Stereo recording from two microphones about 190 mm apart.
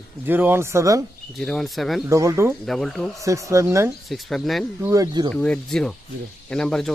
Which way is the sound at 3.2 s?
15° right (ahead or behind).